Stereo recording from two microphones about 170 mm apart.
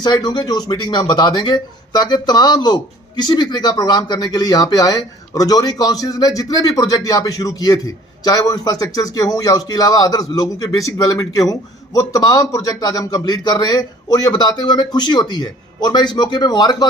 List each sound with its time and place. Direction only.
0.0 s speech: 25° left (ahead or behind)